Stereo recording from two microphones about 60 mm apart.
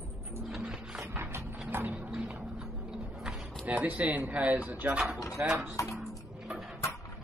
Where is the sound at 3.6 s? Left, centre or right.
Right.